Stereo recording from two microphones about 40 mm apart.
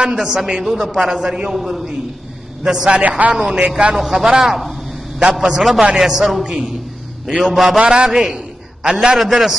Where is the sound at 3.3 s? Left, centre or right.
Centre.